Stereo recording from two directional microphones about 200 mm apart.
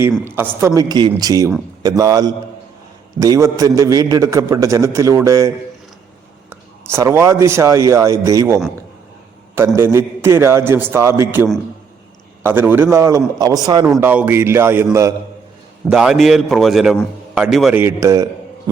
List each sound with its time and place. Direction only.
0.3 s a man's voice: 10° right (ahead or behind)
6.5 s speech: 15° right (ahead or behind)
9.6 s a man's voice: 10° right (ahead or behind)
13.8 s a man's voice: 5° right (ahead or behind)
15.9 s a man's voice: 5° right (ahead or behind)